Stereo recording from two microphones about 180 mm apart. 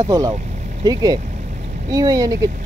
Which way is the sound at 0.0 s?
20° right (ahead or behind).